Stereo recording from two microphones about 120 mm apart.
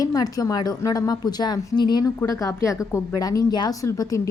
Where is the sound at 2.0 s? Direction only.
25° left (ahead or behind).